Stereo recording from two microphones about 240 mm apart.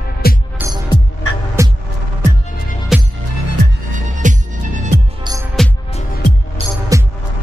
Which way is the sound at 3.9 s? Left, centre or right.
Right.